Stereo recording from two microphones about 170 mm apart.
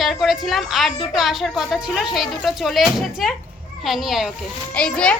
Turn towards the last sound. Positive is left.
turn(degrees=5)  # may be behind; listen again after turning